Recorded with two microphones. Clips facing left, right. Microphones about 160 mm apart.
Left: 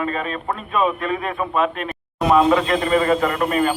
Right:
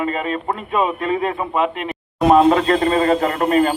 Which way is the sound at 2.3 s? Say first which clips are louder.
Right 3 dB; 45° right (ahead or behind).